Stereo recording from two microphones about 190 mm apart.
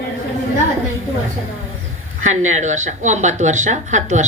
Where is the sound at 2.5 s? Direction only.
40° right (ahead or behind).